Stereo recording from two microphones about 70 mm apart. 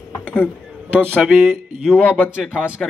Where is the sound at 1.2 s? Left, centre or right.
Centre.